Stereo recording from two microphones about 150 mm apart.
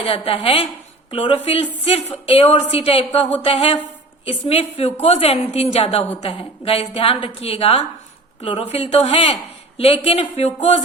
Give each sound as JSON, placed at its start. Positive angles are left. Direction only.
{"t": 0.3, "sound": "speech", "side_deg": 40}